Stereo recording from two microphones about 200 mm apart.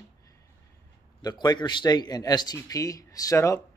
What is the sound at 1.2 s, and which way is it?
A man's voice, 20° left (ahead or behind).